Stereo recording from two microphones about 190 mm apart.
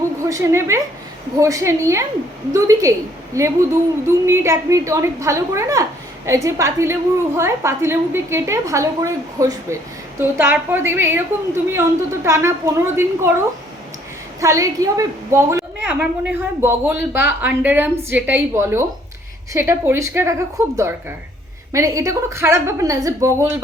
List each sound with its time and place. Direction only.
0.3 s a woman's voice: 15° right (ahead or behind)
14.4 s a woman's voice: 15° right (ahead or behind)